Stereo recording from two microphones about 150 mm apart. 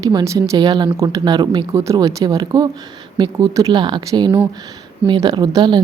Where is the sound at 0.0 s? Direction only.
25° right (ahead or behind).